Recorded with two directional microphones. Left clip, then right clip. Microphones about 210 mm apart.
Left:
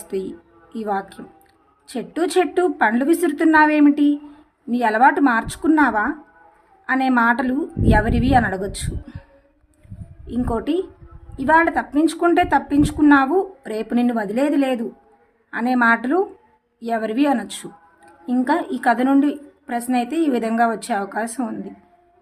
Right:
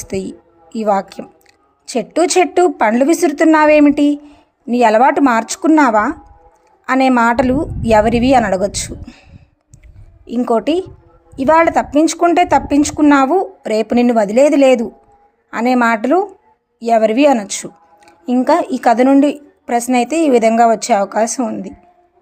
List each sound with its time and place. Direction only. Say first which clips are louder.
0.1 s a woman's voice: right 3 dB; 30° right (ahead or behind)
10.2 s a woman's voice: right 8 dB; 30° right (ahead or behind)